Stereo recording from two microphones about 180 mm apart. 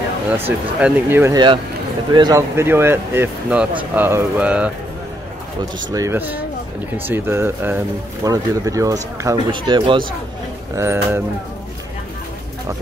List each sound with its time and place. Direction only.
0.5 s speech: 10° right (ahead or behind)
5.9 s speech: 15° right (ahead or behind)
10.8 s speech: 15° right (ahead or behind)